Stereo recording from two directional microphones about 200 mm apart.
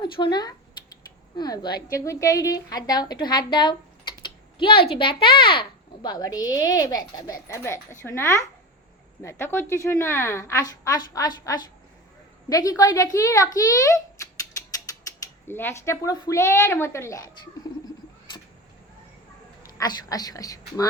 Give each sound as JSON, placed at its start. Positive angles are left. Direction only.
{"t": 0.0, "sound": "a woman's voice", "side_deg": 20}
{"t": 15.4, "sound": "a woman's voice", "side_deg": 10}
{"t": 19.8, "sound": "a woman's voice", "side_deg": 20}